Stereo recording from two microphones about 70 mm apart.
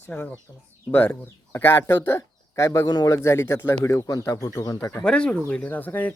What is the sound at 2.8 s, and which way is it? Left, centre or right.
Speech, left.